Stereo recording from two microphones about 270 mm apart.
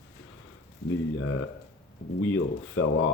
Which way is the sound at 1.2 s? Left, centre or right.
Left.